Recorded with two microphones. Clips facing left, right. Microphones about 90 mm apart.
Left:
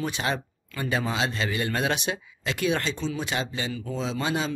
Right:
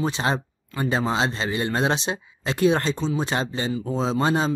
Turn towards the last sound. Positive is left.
turn(degrees=-35)  # may be behind; listen again after turning